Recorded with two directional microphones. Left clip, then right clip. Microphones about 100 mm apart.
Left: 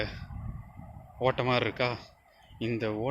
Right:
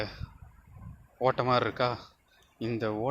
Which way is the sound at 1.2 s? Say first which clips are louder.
Right 1 dB; 10° right (ahead or behind).